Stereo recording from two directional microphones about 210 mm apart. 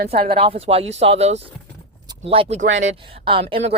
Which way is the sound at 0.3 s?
25° right (ahead or behind).